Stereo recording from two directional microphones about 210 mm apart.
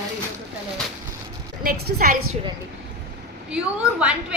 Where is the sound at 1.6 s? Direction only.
45° right (ahead or behind).